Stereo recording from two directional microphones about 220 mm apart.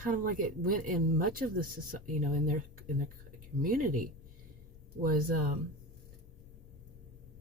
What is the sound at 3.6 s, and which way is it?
Speech, 40° right (ahead or behind).